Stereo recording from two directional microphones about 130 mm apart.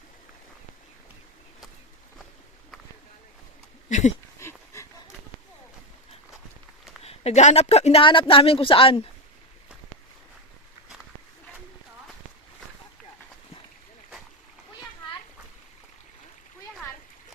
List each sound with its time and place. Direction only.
3.8 s speech: 65° left (ahead or behind)
4.4 s a sound: 20° left (ahead or behind)
7.0 s a woman's voice: 50° left (ahead or behind)
8.0 s speech: 40° left (ahead or behind)